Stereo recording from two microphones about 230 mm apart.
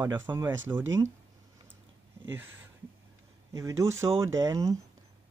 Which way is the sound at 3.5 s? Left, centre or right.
Centre.